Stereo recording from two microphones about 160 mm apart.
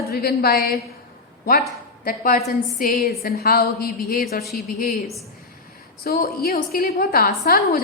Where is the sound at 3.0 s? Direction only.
80° left.